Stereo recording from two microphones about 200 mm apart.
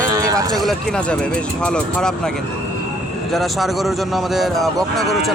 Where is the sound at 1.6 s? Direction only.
5° left (ahead or behind).